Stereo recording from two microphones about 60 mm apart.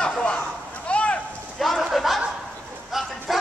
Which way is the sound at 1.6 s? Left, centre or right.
Centre.